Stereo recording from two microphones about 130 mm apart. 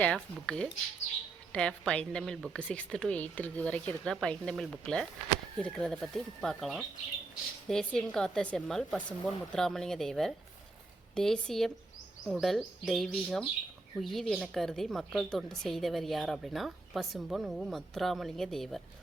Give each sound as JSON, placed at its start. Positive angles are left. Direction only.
{"t": 0.0, "sound": "a woman's voice", "side_deg": 5}